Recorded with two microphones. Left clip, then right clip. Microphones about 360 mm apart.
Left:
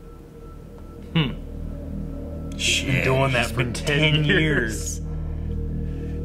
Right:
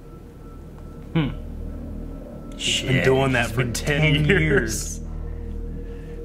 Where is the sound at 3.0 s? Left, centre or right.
Left.